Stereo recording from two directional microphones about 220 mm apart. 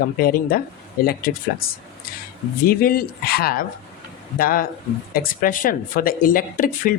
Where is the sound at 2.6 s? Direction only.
40° left (ahead or behind).